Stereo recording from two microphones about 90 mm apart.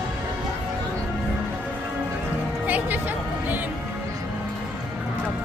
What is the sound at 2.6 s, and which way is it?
Music, 20° right (ahead or behind).